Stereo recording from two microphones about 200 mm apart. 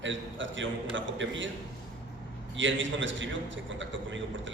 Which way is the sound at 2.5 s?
70° right (ahead or behind).